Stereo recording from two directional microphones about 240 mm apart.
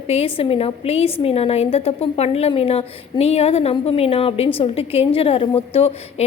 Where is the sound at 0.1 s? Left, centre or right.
Left.